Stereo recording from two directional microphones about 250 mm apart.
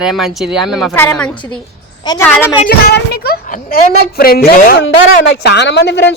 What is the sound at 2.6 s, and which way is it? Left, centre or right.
A woman's voice, left.